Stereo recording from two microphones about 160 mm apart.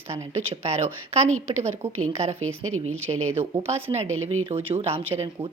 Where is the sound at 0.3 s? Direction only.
40° right (ahead or behind).